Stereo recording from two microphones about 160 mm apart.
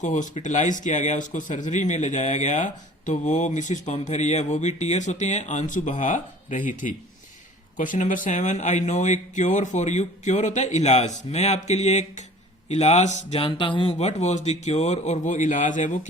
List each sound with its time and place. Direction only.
0.0 s speech: 50° left (ahead or behind); by 13.9 s 30° left (ahead or behind)
14.0 s speech: 45° left (ahead or behind)